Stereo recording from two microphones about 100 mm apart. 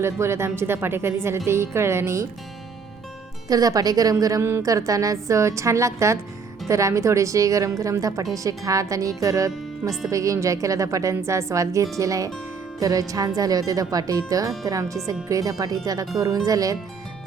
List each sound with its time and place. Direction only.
0.0 s speech: 25° right (ahead or behind)
3.5 s a woman's voice: 40° right (ahead or behind)